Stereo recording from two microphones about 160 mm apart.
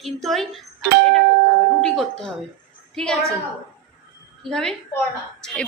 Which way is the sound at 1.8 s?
5° left (ahead or behind).